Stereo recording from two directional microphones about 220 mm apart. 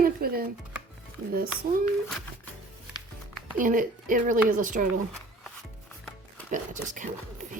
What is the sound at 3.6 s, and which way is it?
A woman's voice, 40° right (ahead or behind).